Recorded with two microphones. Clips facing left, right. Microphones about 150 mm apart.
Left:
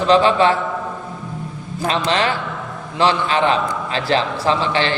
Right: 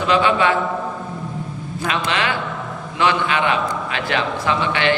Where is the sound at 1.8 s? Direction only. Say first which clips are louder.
Left 3 dB; 35° left (ahead or behind).